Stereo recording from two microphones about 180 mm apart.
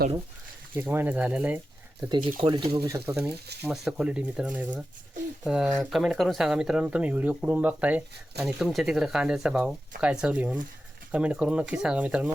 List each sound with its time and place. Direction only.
0.8 s speech: 10° right (ahead or behind)
2.0 s speech: 25° right (ahead or behind)
3.6 s speech: 5° right (ahead or behind)